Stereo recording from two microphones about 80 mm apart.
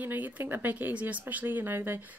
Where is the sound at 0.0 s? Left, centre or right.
Right.